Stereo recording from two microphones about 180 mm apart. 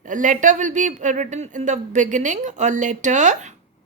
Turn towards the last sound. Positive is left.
turn(degrees=-40)  # may be behind; listen again after turning